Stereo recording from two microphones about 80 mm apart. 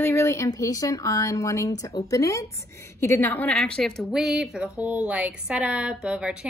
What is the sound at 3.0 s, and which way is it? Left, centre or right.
Speech, left.